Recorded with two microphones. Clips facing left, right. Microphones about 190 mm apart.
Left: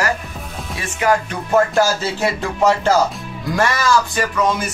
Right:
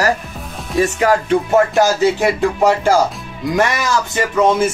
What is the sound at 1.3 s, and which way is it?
Speech, 15° right (ahead or behind).